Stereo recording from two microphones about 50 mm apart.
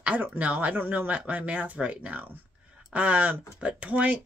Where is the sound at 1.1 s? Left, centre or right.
Right.